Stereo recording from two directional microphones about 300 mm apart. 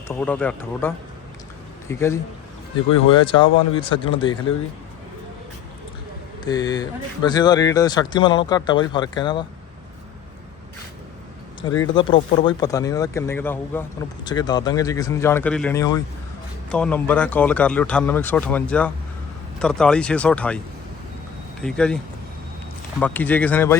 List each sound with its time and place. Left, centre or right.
0.1 s speech: centre
6.4 s speech: centre
11.8 s speech: centre
21.6 s speech: centre
23.0 s speech: centre